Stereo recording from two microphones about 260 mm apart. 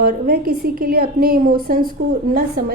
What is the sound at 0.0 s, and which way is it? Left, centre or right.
A woman's voice, right.